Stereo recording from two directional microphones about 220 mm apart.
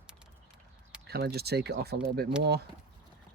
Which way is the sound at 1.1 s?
45° right (ahead or behind).